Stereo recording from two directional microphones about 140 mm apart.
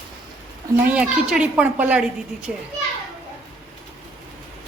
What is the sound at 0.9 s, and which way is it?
A child's voice, 10° right (ahead or behind).